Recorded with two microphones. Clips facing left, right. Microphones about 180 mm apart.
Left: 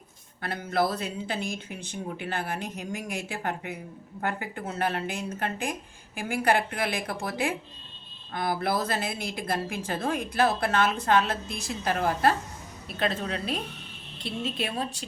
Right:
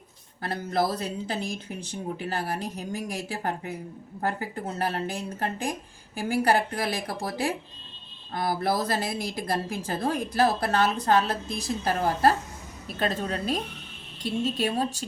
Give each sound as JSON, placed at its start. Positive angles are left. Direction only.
{"t": 0.4, "sound": "speech", "side_deg": -35}